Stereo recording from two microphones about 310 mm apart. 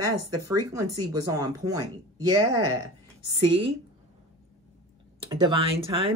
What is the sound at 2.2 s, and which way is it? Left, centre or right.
Speech, right.